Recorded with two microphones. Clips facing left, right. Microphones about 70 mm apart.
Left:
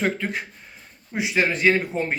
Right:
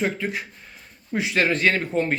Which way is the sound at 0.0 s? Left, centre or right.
Left.